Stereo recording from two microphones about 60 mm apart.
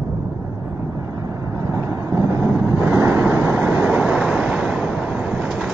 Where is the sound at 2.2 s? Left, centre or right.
Right.